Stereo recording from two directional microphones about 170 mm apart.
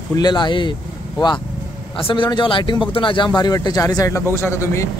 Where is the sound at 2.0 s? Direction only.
30° left (ahead or behind).